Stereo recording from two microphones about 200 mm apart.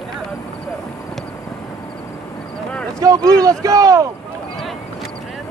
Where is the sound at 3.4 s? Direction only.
15° right (ahead or behind).